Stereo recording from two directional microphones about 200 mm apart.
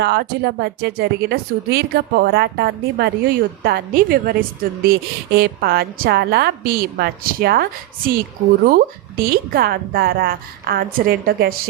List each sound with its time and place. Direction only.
0.0 s speech: 55° right (ahead or behind)